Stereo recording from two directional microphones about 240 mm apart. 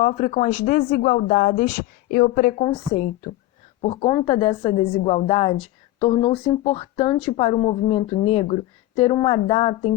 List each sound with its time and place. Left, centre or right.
0.0 s a woman's voice: left